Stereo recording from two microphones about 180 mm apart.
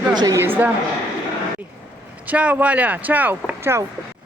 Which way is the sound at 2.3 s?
5° right (ahead or behind).